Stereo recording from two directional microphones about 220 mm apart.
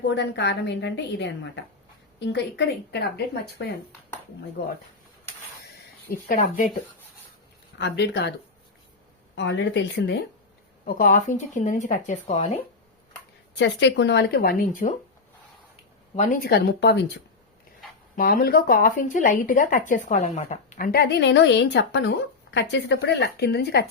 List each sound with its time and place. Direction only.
0.1 s speech: 50° left (ahead or behind)
4.6 s speech: 50° left (ahead or behind)
6.1 s speech: 40° left (ahead or behind)
7.8 s speech: 50° left (ahead or behind)
9.3 s speech: 55° left (ahead or behind)
10.8 s speech: 40° left (ahead or behind)
13.6 s speech: 55° left (ahead or behind); by 14.9 s 40° left (ahead or behind)
16.1 s speech: 35° left (ahead or behind)
18.2 s speech: 40° left (ahead or behind)